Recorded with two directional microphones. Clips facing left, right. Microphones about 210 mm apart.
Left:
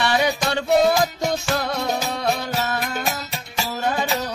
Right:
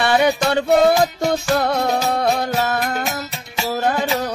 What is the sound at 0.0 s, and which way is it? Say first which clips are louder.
Music: right 4 dB; 55° right (ahead or behind).